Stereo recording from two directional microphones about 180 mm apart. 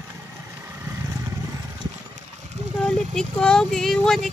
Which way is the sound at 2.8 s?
5° left (ahead or behind).